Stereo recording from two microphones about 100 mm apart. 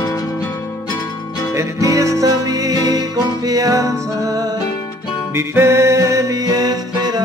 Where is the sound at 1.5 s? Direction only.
30° right (ahead or behind).